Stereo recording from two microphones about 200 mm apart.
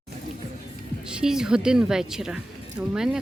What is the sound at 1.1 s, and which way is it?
A woman's voice, 5° right (ahead or behind).